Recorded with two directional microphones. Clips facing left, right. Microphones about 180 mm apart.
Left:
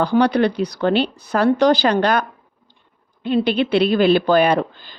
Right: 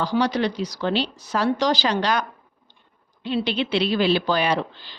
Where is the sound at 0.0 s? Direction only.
60° left (ahead or behind).